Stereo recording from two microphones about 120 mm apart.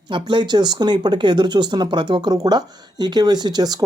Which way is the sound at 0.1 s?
40° right (ahead or behind).